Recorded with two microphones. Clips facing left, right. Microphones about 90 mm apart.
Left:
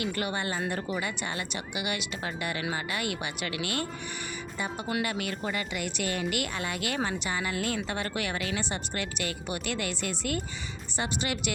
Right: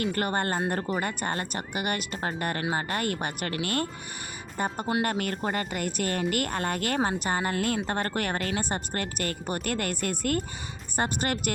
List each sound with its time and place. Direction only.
0.0 s speech: 45° right (ahead or behind)